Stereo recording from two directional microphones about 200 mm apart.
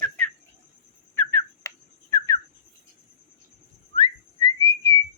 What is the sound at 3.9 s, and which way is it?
Whistling, 20° left (ahead or behind).